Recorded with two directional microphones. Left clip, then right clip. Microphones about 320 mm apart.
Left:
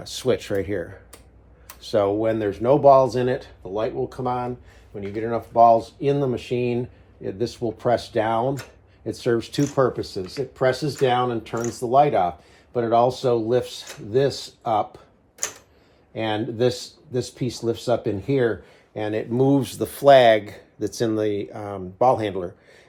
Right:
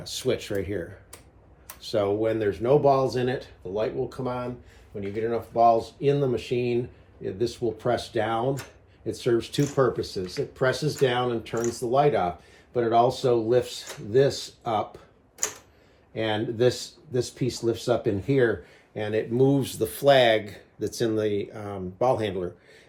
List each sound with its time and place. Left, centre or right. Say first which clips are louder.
0.0 s speech: left 4 dB; left
16.1 s speech: left 2 dB; centre